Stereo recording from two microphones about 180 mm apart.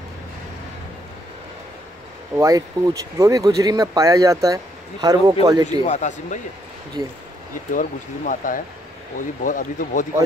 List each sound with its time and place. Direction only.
2.3 s speech: 20° right (ahead or behind)
5.9 s speech: 40° left (ahead or behind)
7.7 s speech: 45° left (ahead or behind)